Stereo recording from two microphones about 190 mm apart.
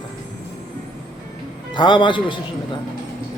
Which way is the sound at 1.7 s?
25° left (ahead or behind).